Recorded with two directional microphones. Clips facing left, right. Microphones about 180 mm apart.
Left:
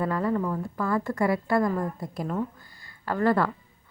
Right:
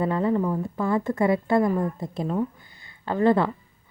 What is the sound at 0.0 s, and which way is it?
Speech, 20° right (ahead or behind).